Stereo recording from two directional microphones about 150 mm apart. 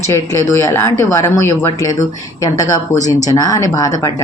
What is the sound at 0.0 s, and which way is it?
A woman's voice, 20° left (ahead or behind).